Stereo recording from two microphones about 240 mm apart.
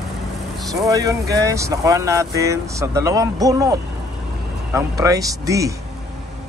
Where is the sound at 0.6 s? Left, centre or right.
Centre.